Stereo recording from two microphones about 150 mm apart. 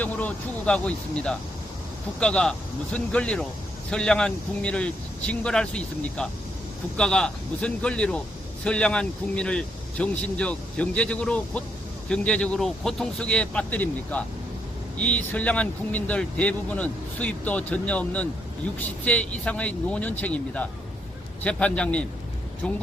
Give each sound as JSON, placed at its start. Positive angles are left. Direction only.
{"t": 0.0, "sound": "speech", "side_deg": 10}